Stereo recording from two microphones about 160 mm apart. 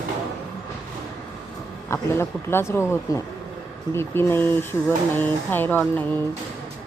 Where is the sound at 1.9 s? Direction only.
15° left (ahead or behind).